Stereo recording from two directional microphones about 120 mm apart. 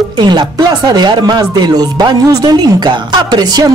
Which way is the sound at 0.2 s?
35° right (ahead or behind).